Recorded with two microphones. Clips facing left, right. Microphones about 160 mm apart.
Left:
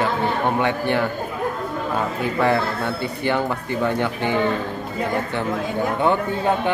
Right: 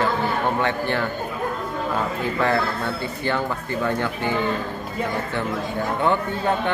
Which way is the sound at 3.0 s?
15° left (ahead or behind).